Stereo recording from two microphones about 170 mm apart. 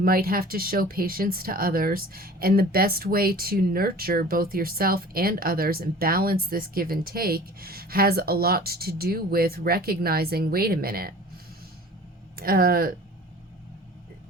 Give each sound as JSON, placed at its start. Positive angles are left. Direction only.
{"t": 0.0, "sound": "speech", "side_deg": -60}
{"t": 12.4, "sound": "speech", "side_deg": -60}